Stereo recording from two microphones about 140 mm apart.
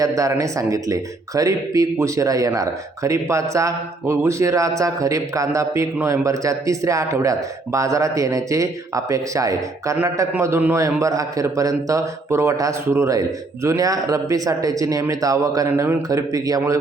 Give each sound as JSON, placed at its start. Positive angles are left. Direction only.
{"t": 0.2, "sound": "a man's voice", "side_deg": -25}